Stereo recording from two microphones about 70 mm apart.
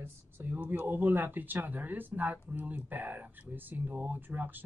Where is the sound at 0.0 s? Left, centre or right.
Right.